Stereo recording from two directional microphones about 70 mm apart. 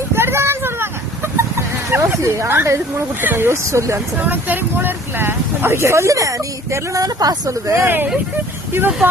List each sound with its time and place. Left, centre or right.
0.2 s a sound: right
4.2 s speech: right
7.0 s speech: right
7.8 s speech: right